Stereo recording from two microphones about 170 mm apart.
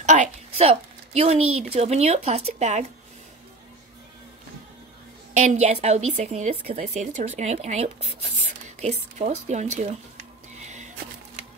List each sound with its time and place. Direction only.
0.0 s a woman's voice: 45° right (ahead or behind)
5.3 s a woman's voice: 40° right (ahead or behind)
10.6 s music: 45° right (ahead or behind)